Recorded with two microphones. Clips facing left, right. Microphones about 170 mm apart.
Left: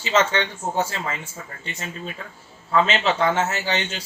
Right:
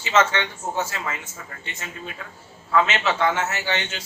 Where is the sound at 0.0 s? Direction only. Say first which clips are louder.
Even; 35° left (ahead or behind).